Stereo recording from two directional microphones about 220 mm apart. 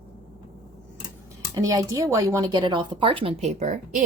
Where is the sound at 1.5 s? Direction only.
15° right (ahead or behind).